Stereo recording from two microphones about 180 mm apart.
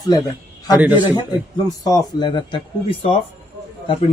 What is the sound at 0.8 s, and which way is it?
Speech, 10° right (ahead or behind).